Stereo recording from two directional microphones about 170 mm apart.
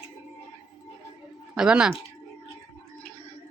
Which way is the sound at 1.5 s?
5° right (ahead or behind).